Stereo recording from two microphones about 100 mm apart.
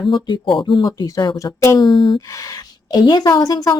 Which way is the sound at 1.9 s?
45° left (ahead or behind).